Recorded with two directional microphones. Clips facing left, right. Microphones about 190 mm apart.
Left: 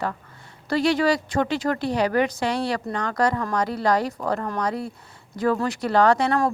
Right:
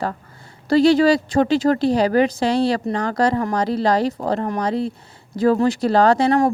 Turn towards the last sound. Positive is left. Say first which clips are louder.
# right 4 dB
turn(degrees=-30)  # may be behind; listen again after turning